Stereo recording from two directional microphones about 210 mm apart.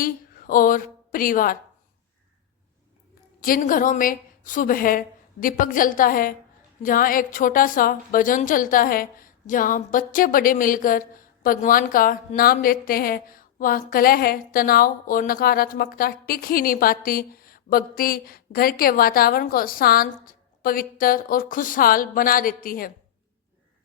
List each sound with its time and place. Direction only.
0.0 s a woman's voice: 40° left (ahead or behind)
3.4 s a woman's voice: 40° left (ahead or behind)